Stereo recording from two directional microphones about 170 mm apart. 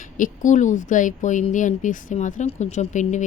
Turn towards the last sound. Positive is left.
turn(degrees=45)  # may be behind; listen again after turning